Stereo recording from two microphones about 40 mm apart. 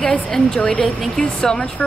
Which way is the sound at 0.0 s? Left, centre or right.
Centre.